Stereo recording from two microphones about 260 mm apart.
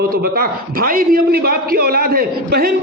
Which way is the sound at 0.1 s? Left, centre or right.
Right.